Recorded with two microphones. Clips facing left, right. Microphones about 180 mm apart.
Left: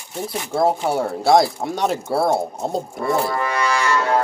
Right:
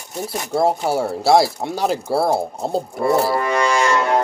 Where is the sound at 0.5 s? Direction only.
Centre (ahead or behind).